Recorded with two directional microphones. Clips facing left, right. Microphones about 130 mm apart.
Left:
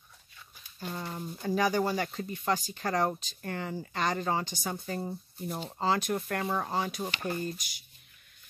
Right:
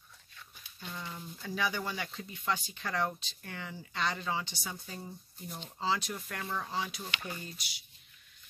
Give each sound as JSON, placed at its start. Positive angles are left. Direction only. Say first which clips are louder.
{"t": 0.7, "sound": "speech", "louder": "left 6 dB", "side_deg": 45}